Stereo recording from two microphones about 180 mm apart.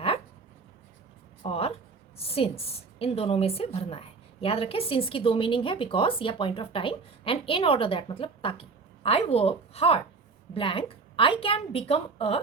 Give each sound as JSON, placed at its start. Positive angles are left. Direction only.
{"t": 1.5, "sound": "a woman's voice", "side_deg": 35}